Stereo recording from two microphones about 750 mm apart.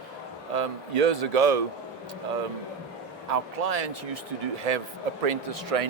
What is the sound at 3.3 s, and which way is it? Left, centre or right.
Speech, right.